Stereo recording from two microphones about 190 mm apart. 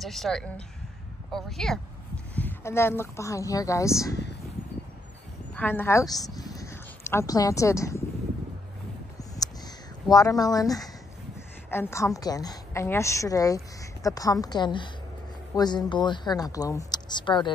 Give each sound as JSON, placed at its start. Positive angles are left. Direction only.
{"t": 0.0, "sound": "a woman's voice", "side_deg": 0}
{"t": 5.6, "sound": "speech", "side_deg": 10}
{"t": 9.4, "sound": "crow", "side_deg": 20}
{"t": 10.0, "sound": "a woman's voice", "side_deg": 20}